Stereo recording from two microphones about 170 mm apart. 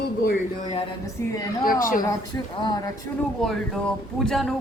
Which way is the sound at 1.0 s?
20° left (ahead or behind).